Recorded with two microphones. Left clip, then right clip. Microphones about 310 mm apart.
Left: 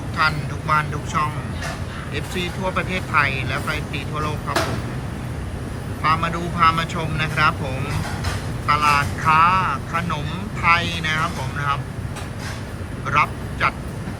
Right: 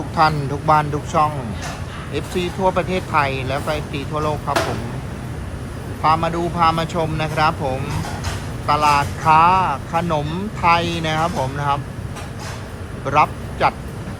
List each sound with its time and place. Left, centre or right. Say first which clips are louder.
0.2 s speech: right 4 dB; centre
6.0 s speech: right 3 dB; centre
8.6 s speech: right 2 dB; centre
13.1 s speech: right 3 dB; centre